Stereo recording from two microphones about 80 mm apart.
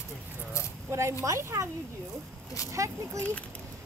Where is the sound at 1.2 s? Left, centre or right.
Right.